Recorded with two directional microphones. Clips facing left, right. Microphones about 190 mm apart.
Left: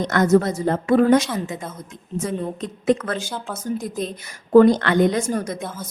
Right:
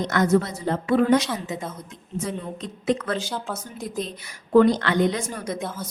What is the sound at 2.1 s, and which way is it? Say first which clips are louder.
Speech: left 4 dB; 50° left (ahead or behind).